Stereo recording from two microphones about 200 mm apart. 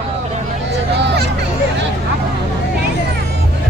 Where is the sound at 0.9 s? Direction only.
55° right (ahead or behind).